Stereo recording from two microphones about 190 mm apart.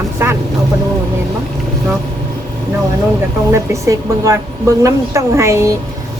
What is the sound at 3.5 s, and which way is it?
Speech, 15° right (ahead or behind).